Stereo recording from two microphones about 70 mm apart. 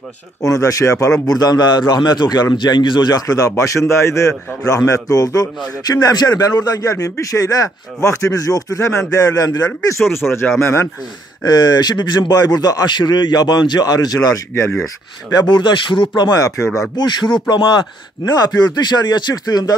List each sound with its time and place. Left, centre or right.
0.4 s speech: left
1.2 s a man's voice: left
10.1 s speech: left
11.4 s a man's voice: left
14.5 s speech: left
15.3 s speech: left
16.2 s a man's voice: left
16.4 s speech: left
16.9 s speech: left